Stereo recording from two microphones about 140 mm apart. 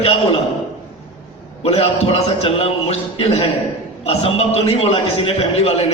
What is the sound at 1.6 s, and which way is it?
A man's voice, 45° left (ahead or behind).